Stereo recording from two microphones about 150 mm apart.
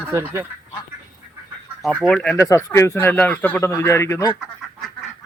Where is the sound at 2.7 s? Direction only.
20° left (ahead or behind).